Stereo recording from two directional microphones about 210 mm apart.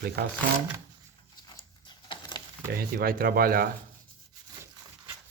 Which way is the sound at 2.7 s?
45° right (ahead or behind).